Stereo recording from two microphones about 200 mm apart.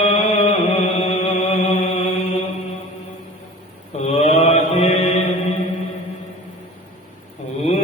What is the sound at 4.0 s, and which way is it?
Mantra, 35° left (ahead or behind).